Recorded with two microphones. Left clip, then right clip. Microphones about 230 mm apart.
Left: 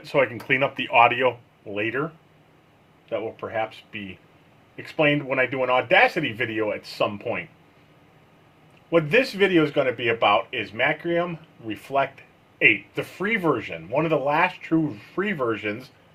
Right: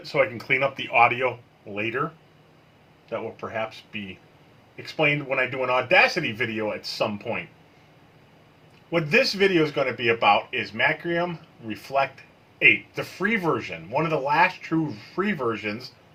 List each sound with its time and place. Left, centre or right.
0.0 s speech: left
4.8 s speech: left
8.9 s speech: left